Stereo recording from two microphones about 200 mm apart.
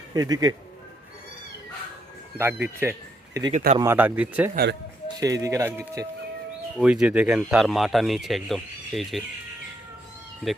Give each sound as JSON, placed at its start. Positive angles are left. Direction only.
{"t": 0.1, "sound": "speech", "side_deg": -20}
{"t": 2.4, "sound": "speech", "side_deg": -10}
{"t": 4.5, "sound": "speech", "side_deg": -55}
{"t": 5.2, "sound": "speech", "side_deg": -15}
{"t": 6.7, "sound": "speech", "side_deg": -5}